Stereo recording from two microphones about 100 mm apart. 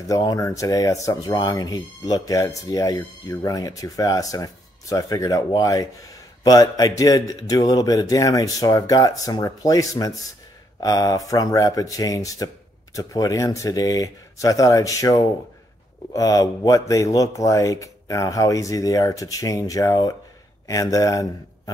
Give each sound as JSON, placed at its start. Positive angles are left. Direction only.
{"t": 0.1, "sound": "a man's voice", "side_deg": 40}